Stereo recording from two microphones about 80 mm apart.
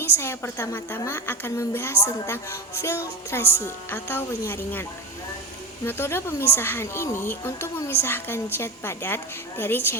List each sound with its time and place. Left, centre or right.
0.0 s a woman's voice: left